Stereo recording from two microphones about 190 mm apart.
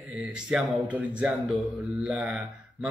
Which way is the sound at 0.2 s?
5° right (ahead or behind).